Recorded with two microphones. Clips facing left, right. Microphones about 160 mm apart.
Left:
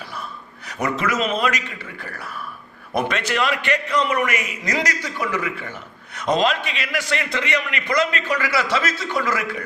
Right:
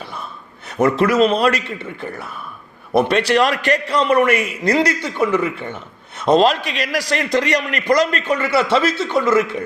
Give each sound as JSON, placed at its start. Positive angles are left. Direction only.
{"t": 0.9, "sound": "a man's voice", "side_deg": -35}
{"t": 1.8, "sound": "speech", "side_deg": -25}
{"t": 2.9, "sound": "a man's voice", "side_deg": -35}